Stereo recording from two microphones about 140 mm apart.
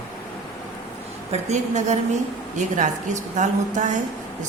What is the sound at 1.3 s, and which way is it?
A woman's voice, 55° right (ahead or behind).